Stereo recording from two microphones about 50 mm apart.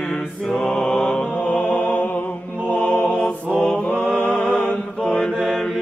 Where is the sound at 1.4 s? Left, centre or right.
Left.